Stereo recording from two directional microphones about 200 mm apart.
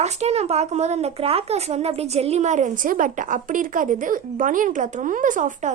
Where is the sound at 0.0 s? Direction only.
35° right (ahead or behind).